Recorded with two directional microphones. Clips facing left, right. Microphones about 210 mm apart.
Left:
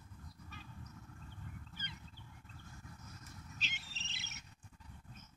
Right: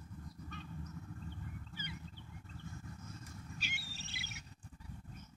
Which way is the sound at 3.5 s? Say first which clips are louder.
Right 4 dB; 10° right (ahead or behind).